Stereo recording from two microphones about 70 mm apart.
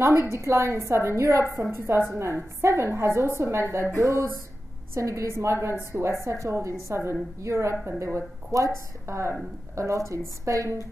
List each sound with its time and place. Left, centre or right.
0.0 s a woman's voice: right